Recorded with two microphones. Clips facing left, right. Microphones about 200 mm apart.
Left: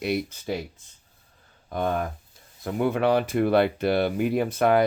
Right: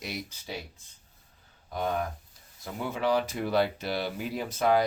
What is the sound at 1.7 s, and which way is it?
Speech, 55° left (ahead or behind).